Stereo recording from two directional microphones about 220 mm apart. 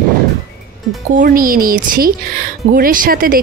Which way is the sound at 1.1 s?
40° right (ahead or behind).